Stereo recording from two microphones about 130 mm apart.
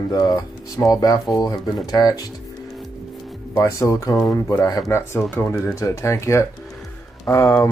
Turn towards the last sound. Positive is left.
turn(degrees=20)  # may be behind; listen again after turning